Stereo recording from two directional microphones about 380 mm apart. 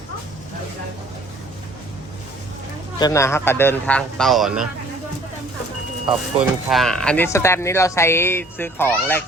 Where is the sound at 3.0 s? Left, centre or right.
Centre.